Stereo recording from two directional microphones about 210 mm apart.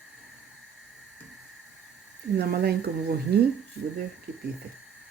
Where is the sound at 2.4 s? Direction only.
50° right (ahead or behind).